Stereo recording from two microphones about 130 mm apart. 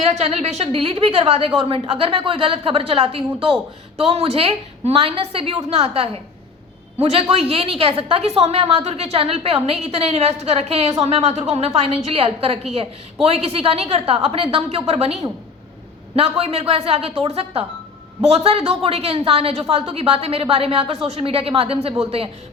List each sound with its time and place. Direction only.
0.0 s a woman's voice: 55° right (ahead or behind)